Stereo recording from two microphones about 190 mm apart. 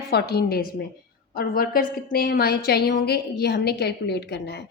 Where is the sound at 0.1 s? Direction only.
55° left (ahead or behind).